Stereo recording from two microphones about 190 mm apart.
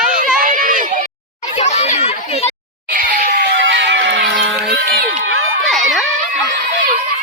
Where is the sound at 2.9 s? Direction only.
50° right (ahead or behind).